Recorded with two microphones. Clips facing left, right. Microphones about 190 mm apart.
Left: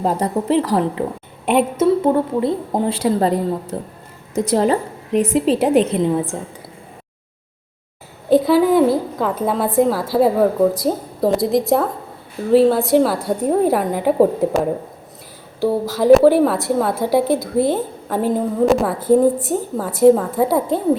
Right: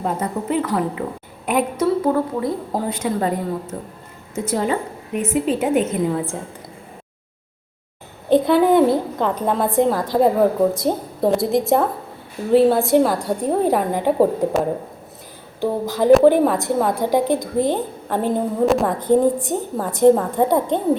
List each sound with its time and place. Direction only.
0.0 s a woman's voice: 35° left (ahead or behind)
5.9 s a woman's voice: 20° left (ahead or behind)
8.3 s a woman's voice: centre (ahead or behind)
15.9 s a woman's voice: centre (ahead or behind)